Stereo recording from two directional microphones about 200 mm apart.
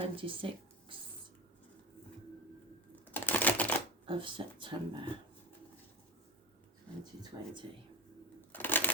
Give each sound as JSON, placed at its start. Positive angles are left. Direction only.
{"t": 0.0, "sound": "speech", "side_deg": -25}
{"t": 3.1, "sound": "typing", "side_deg": 10}
{"t": 4.0, "sound": "speech", "side_deg": -25}
{"t": 7.0, "sound": "speech", "side_deg": -20}
{"t": 8.5, "sound": "bird", "side_deg": 10}